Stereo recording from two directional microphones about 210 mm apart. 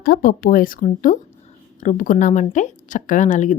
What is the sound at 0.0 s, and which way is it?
Speech, 45° left (ahead or behind).